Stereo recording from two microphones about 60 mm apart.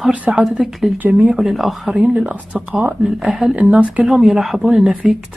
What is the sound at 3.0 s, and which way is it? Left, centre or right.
Speech, centre.